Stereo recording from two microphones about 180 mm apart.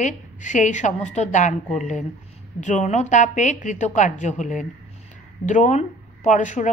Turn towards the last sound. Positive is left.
turn(degrees=45)  # may be behind; listen again after turning